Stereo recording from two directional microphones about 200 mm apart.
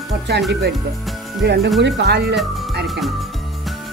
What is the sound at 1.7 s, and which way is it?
Speech, 60° right (ahead or behind).